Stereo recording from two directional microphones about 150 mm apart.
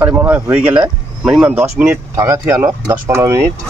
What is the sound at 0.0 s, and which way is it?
Speech, 15° right (ahead or behind).